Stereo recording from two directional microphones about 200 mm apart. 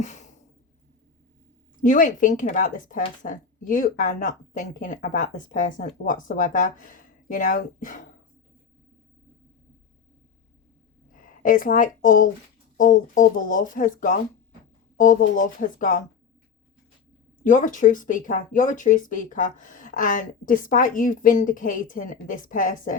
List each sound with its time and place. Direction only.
0.0 s sigh: 35° left (ahead or behind)
1.8 s speech: 40° left (ahead or behind)
11.1 s speech: 45° left (ahead or behind)
17.4 s speech: 40° left (ahead or behind)